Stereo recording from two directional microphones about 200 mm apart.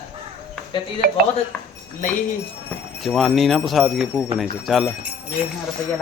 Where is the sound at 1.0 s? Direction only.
50° right (ahead or behind).